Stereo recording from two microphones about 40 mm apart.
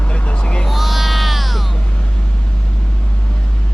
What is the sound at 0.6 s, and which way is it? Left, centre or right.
Music, centre.